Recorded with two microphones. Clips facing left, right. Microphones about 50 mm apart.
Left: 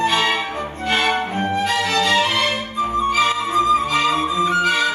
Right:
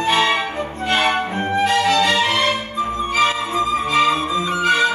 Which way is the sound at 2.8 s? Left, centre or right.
Right.